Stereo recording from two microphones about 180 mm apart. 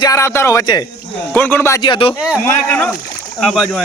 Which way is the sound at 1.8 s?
30° left (ahead or behind).